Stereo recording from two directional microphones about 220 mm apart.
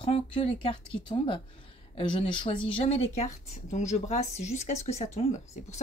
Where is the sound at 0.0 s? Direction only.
25° left (ahead or behind).